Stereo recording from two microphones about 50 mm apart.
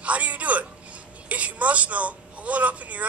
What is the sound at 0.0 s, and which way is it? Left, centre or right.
A woman's voice, right.